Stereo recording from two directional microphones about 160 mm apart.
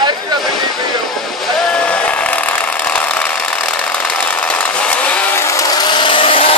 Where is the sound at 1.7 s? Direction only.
5° left (ahead or behind).